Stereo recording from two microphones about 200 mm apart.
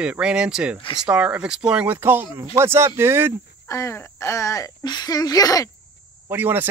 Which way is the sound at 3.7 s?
15° left (ahead or behind).